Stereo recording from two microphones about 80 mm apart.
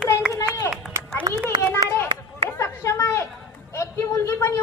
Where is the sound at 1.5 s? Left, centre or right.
Right.